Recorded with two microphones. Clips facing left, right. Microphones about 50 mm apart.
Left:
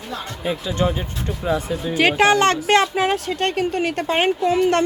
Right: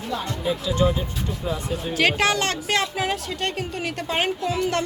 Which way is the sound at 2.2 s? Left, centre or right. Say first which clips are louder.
Left 7 dB; left.